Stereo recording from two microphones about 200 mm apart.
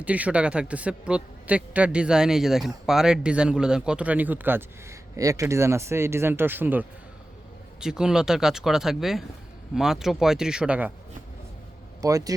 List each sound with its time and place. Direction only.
0.0 s a man's voice: 5° right (ahead or behind)
12.0 s a man's voice: 15° right (ahead or behind)